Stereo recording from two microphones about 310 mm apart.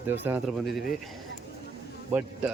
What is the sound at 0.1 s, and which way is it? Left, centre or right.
Speech, centre.